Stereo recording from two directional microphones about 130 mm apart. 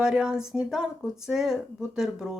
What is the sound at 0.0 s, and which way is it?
Speech, 5° right (ahead or behind).